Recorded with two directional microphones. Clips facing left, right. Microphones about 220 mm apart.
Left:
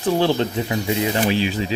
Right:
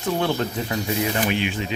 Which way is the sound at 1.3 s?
35° left (ahead or behind).